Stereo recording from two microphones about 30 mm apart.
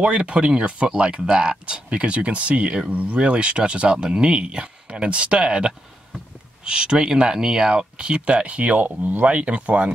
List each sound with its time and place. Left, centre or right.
0.0 s speech: right
3.2 s speech: right
8.5 s speech: right
9.2 s speech: right